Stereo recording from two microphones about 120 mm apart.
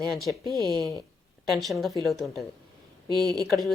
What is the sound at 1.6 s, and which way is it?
Speech, centre (ahead or behind).